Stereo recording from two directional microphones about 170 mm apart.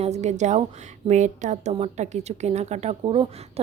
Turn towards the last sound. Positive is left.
turn(degrees=-35)  # may be behind; listen again after turning